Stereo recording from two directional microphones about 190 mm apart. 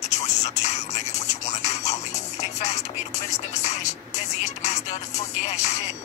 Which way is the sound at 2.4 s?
35° left (ahead or behind).